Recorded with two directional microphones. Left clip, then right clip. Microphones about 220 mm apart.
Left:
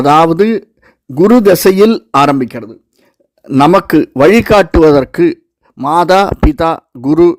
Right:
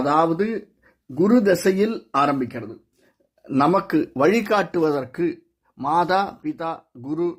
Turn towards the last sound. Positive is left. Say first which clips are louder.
# left 17 dB
turn(degrees=45)  # may be behind; listen again after turning